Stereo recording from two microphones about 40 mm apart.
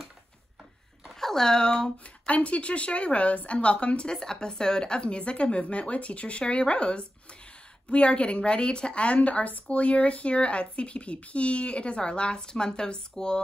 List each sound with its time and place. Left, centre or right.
1.2 s speech: centre
2.2 s a woman's voice: left